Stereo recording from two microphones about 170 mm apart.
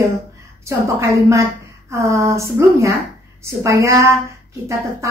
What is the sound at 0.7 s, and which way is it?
A woman's voice, 15° right (ahead or behind).